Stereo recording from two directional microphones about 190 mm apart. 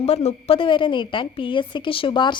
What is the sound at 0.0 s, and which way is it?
A woman's voice, 35° left (ahead or behind).